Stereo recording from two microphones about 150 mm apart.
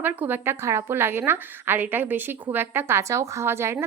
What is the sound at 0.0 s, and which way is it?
A woman's voice, 15° right (ahead or behind).